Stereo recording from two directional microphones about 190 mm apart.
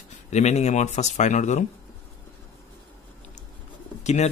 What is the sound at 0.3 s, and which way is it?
Speech, 35° left (ahead or behind).